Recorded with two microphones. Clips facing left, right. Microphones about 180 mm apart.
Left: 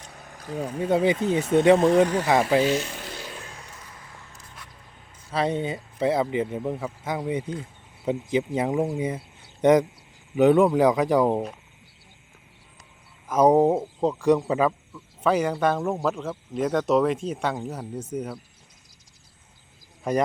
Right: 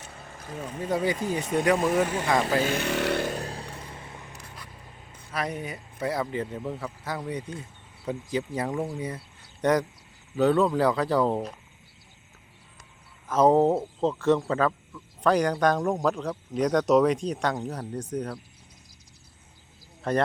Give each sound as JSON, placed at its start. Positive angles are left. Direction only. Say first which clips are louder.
{"t": 0.9, "sound": "speech", "louder": "left 5 dB", "side_deg": 25}
{"t": 2.6, "sound": "speech", "louder": "left 2 dB", "side_deg": -55}
{"t": 3.2, "sound": "vehicle", "louder": "right 8 dB", "side_deg": -40}
{"t": 4.3, "sound": "a sound", "louder": "right 4 dB", "side_deg": -65}
{"t": 5.3, "sound": "speech", "louder": "left 7 dB", "side_deg": 30}
{"t": 13.2, "sound": "speech", "louder": "left 2 dB", "side_deg": 10}
{"t": 20.1, "sound": "speech", "louder": "left 2 dB", "side_deg": 10}